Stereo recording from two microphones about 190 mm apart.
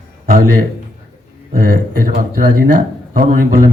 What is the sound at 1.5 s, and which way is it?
A man's voice, 50° right (ahead or behind).